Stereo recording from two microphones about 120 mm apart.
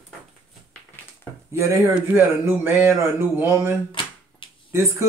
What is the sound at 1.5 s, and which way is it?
Speech, 25° right (ahead or behind).